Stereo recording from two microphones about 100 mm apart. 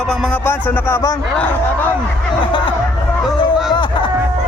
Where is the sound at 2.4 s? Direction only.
55° left (ahead or behind).